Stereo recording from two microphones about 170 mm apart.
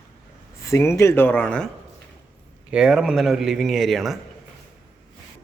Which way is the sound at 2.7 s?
5° right (ahead or behind).